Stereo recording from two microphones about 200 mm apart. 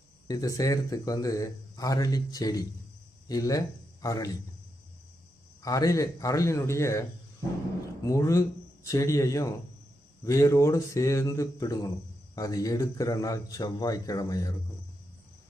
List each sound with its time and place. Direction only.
0.3 s speech: 15° left (ahead or behind)
5.6 s speech: 15° left (ahead or behind)
8.0 s speech: 15° left (ahead or behind)